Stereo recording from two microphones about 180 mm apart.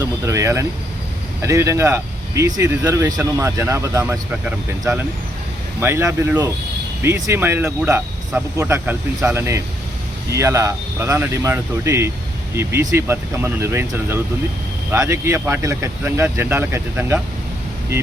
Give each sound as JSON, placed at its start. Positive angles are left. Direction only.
{"t": 0.0, "sound": "vehicle", "side_deg": -15}
{"t": 1.4, "sound": "speech", "side_deg": -15}